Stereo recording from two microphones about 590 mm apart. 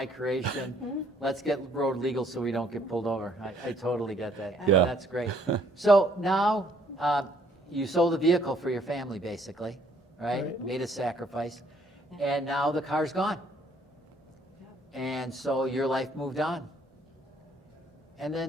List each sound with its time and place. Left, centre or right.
0.0 s a man's voice: centre
5.3 s speech: right
5.7 s a man's voice: centre
14.9 s a man's voice: centre
18.2 s a man's voice: centre